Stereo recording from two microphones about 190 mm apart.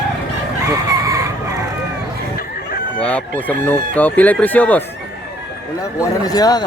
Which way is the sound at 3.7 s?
10° left (ahead or behind).